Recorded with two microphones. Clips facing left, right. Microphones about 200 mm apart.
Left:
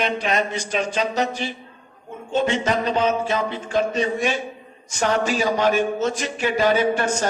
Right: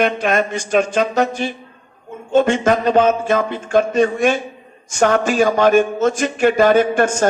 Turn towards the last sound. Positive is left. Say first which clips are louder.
# right 5 dB
turn(degrees=-50)  # may be behind; listen again after turning